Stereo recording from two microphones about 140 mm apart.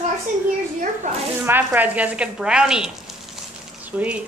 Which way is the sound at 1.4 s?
15° right (ahead or behind).